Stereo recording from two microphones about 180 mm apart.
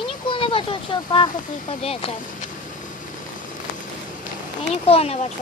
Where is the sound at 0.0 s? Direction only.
30° left (ahead or behind).